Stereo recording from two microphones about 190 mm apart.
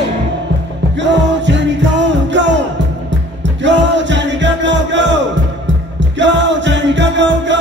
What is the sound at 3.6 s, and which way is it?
Music, 70° right (ahead or behind).